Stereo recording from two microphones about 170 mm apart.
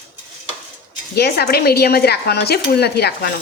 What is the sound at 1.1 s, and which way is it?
Speech, 70° left (ahead or behind).